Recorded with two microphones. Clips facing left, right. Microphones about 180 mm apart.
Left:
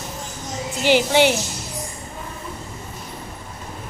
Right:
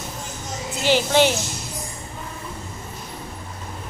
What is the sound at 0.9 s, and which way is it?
Speech, 15° left (ahead or behind).